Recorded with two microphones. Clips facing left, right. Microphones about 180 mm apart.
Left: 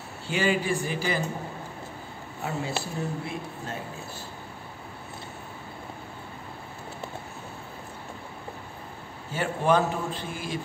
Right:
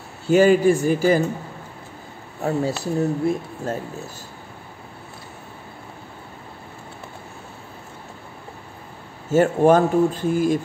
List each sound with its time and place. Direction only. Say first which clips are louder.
0.3 s speech: right 11 dB; 45° right (ahead or behind)
2.4 s speech: right 9 dB; 40° right (ahead or behind)
9.3 s speech: right 9 dB; 45° right (ahead or behind)